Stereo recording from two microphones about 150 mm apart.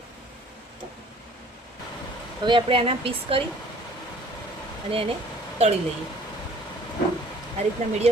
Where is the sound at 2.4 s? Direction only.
35° right (ahead or behind).